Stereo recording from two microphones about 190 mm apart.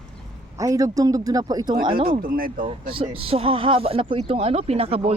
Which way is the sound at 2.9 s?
30° right (ahead or behind).